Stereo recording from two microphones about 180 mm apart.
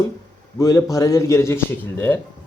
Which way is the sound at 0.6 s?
15° left (ahead or behind).